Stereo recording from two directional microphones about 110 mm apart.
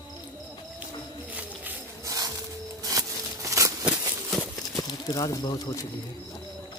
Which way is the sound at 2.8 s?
30° right (ahead or behind).